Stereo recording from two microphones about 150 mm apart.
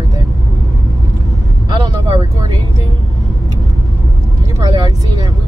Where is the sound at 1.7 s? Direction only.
30° right (ahead or behind).